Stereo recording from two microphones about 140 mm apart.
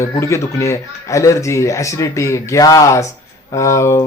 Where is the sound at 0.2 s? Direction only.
20° left (ahead or behind).